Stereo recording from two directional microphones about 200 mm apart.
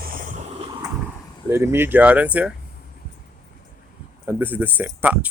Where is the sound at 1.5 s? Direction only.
15° right (ahead or behind).